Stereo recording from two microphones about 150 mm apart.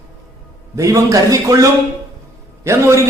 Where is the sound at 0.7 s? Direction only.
20° right (ahead or behind).